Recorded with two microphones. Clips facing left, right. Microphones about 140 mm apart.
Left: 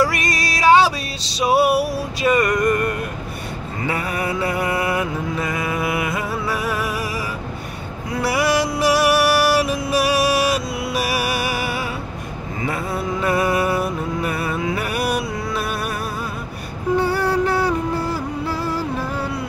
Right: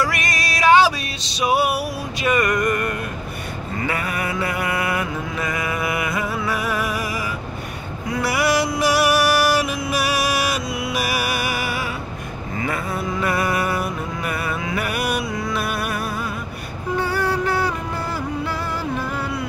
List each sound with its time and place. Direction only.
0.0 s music: 30° left (ahead or behind)
3.8 s mantra: 25° left (ahead or behind)
8.2 s music: 30° left (ahead or behind)
13.2 s music: 30° left (ahead or behind)
17.0 s a sound: 30° left (ahead or behind)